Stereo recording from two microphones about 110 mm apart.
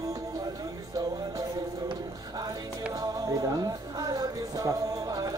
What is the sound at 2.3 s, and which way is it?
Music, 35° right (ahead or behind).